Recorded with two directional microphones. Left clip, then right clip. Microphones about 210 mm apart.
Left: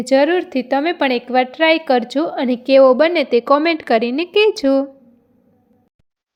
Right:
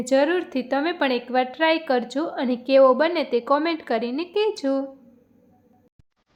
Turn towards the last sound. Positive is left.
turn(degrees=30)  # may be behind; listen again after turning